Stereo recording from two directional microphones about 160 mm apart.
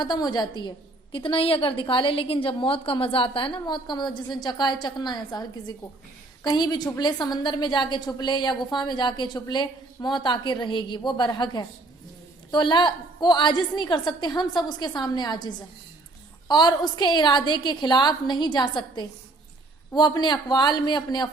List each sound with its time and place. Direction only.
0.0 s a woman's voice: 25° left (ahead or behind)